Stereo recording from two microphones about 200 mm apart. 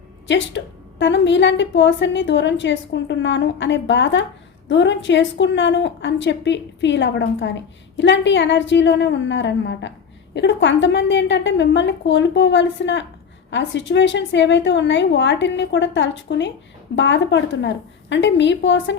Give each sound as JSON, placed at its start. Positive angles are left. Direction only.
{"t": 0.3, "sound": "a woman's voice", "side_deg": 65}